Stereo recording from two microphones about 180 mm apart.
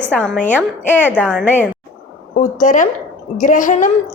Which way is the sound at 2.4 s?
45° left (ahead or behind).